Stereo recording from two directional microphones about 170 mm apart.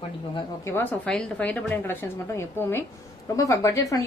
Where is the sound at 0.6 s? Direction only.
15° left (ahead or behind).